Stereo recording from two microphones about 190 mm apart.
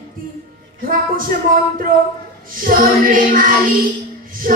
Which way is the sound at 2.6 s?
50° right (ahead or behind).